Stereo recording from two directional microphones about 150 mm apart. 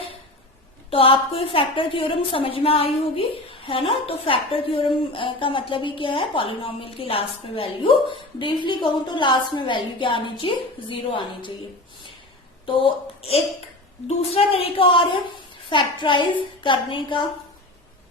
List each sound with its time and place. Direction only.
0.9 s a woman's voice: 40° left (ahead or behind)
12.6 s a woman's voice: 35° left (ahead or behind)